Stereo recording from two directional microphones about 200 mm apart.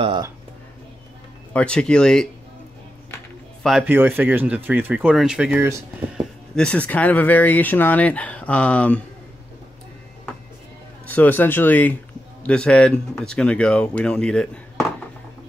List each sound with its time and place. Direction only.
0.0 s speech: 25° right (ahead or behind)
1.5 s speech: 5° left (ahead or behind)
3.6 s speech: 5° right (ahead or behind)
6.5 s speech: 5° left (ahead or behind)
11.1 s speech: 10° left (ahead or behind)